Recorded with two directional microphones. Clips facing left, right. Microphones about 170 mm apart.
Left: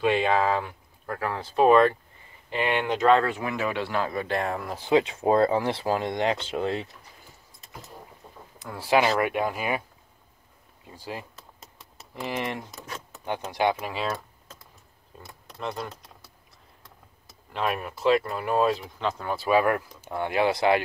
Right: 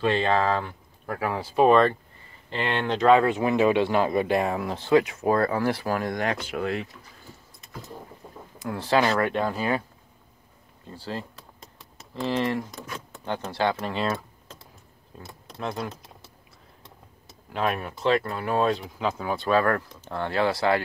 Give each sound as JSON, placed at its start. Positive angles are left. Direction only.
{"t": 0.0, "sound": "speech", "side_deg": 10}
{"t": 1.0, "sound": "speech", "side_deg": -5}
{"t": 1.7, "sound": "speech", "side_deg": 10}
{"t": 3.3, "sound": "speech", "side_deg": -20}
{"t": 4.4, "sound": "speech", "side_deg": -5}
{"t": 4.7, "sound": "speech", "side_deg": 15}
{"t": 5.0, "sound": "speech", "side_deg": 25}
{"t": 8.5, "sound": "speech", "side_deg": 0}
{"t": 8.8, "sound": "speech", "side_deg": 15}
{"t": 10.9, "sound": "a sound", "side_deg": 15}
{"t": 12.2, "sound": "speech", "side_deg": 15}
{"t": 17.5, "sound": "speech", "side_deg": 0}